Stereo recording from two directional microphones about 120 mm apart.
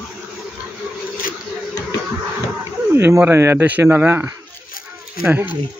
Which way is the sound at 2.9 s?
15° right (ahead or behind).